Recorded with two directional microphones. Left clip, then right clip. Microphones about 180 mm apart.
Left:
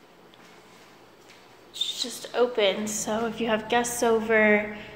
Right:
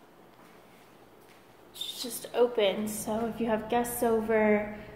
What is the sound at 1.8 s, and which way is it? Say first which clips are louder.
A woman's voice: left 7 dB; centre (ahead or behind).